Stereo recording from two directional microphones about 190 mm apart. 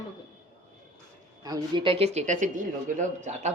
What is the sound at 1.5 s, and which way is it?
Speech, 20° right (ahead or behind).